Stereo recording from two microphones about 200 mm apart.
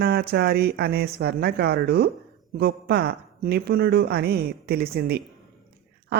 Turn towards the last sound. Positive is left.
turn(degrees=-50)  # may be behind; listen again after turning